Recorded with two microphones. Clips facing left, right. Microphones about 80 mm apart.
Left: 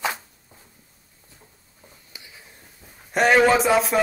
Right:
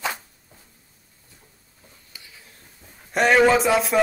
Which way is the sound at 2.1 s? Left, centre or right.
Left.